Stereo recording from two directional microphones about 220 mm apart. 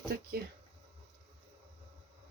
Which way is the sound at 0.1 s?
45° right (ahead or behind).